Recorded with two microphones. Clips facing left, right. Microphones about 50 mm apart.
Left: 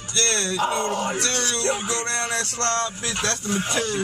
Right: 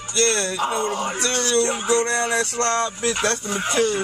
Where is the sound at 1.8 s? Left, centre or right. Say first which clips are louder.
Right 6 dB; right.